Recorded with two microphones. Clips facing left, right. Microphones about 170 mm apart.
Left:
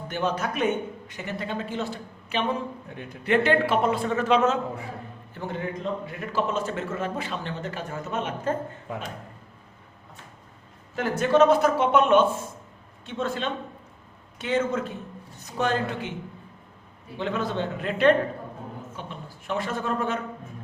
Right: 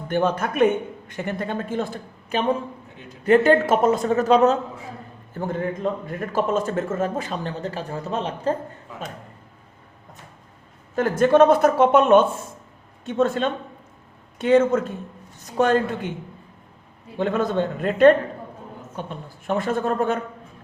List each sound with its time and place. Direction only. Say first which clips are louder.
0.1 s a man's voice: right 6 dB; 55° right (ahead or behind); by 8.5 s 35° right (ahead or behind)
10.9 s a man's voice: right 5 dB; 50° right (ahead or behind)
17.2 s a man's voice: right 6 dB; 50° right (ahead or behind)